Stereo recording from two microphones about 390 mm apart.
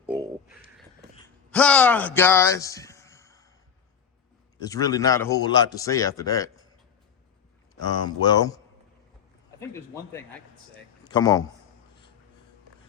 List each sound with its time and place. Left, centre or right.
0.0 s a sound: centre
1.5 s a man's voice: centre
4.6 s a man's voice: centre
8.0 s a man's voice: centre